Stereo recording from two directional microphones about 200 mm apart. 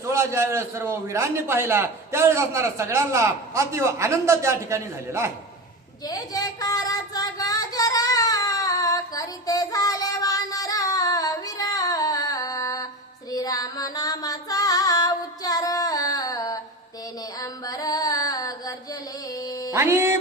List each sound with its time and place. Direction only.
0.0 s a man's voice: 15° right (ahead or behind)
6.1 s child singing: 20° left (ahead or behind)
13.3 s music: 20° left (ahead or behind)
19.7 s music: 10° right (ahead or behind)